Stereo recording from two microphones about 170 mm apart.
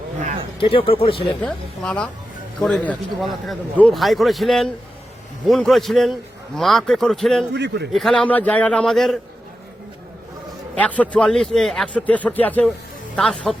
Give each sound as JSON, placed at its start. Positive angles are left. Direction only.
{"t": 0.6, "sound": "speech", "side_deg": 30}
{"t": 1.4, "sound": "a man's voice", "side_deg": 5}
{"t": 7.5, "sound": "a man's voice", "side_deg": -85}
{"t": 7.9, "sound": "a man's voice", "side_deg": 5}
{"t": 10.8, "sound": "a man's voice", "side_deg": 10}